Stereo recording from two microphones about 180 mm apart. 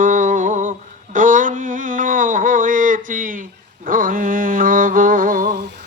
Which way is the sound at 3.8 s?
50° right (ahead or behind).